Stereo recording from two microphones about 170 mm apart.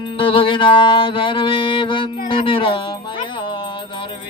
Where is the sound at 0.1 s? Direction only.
30° left (ahead or behind).